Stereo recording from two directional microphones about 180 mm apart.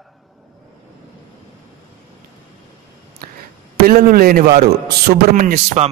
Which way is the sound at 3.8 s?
55° right (ahead or behind).